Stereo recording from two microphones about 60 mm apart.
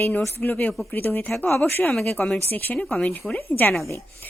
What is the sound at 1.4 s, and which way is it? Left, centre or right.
A woman's voice, left.